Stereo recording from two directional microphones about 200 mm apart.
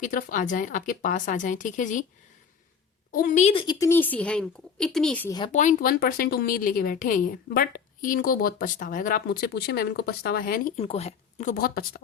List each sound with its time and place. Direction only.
0.0 s speech: 40° left (ahead or behind)
3.1 s speech: 40° left (ahead or behind)
3.5 s speech: 25° left (ahead or behind); by 5.3 s 5° left (ahead or behind)
5.5 s a woman's voice: 40° left (ahead or behind)
10.8 s speech: 30° left (ahead or behind); by 12.0 s 45° left (ahead or behind)